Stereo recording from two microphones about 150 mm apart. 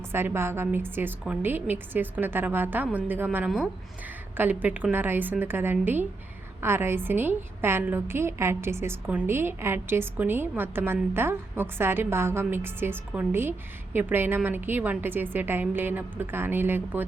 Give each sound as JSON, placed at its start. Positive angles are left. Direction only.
{"t": 0.1, "sound": "a woman's voice", "side_deg": -15}